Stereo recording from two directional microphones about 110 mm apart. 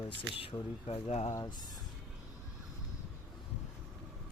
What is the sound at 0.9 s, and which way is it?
Speech, 70° left (ahead or behind).